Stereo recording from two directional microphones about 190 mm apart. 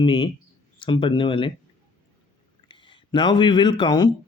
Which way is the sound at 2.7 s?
25° left (ahead or behind).